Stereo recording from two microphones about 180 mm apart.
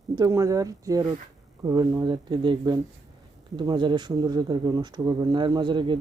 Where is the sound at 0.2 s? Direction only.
20° right (ahead or behind).